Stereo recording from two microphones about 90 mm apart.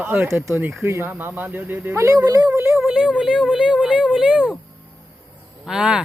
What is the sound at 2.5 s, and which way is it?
Speech, 30° right (ahead or behind).